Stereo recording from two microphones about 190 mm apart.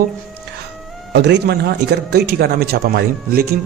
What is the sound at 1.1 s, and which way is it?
Speech, 60° right (ahead or behind).